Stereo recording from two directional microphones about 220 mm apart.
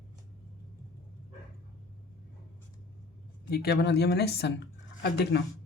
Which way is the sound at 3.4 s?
45° left (ahead or behind).